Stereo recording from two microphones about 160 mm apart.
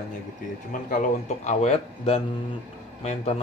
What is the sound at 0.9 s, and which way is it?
A man's voice, 45° left (ahead or behind).